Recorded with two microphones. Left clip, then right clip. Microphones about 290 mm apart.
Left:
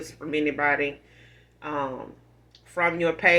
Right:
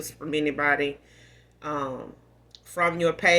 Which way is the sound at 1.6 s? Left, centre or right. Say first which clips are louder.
Left 1 dB; right.